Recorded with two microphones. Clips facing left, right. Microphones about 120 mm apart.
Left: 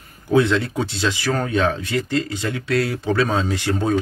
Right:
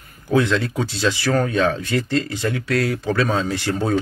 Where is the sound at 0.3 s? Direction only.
20° left (ahead or behind).